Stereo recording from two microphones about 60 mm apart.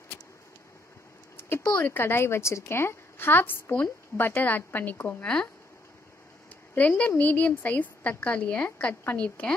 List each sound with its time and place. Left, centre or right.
2.0 s a woman's voice: left
5.2 s speech: centre
6.7 s a woman's voice: left